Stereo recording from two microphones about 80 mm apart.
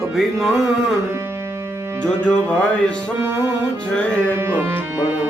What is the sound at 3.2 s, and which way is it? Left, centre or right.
Music, right.